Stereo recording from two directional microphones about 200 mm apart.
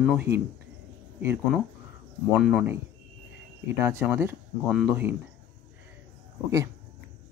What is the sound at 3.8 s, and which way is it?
Speech, 15° right (ahead or behind).